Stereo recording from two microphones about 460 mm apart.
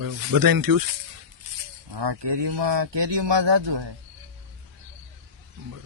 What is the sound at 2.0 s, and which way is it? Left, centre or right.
Speech, right.